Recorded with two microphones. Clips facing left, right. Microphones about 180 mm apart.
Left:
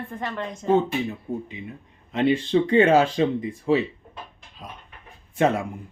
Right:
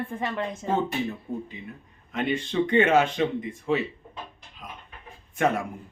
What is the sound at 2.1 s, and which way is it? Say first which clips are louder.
Speech: left 7 dB; 30° left (ahead or behind).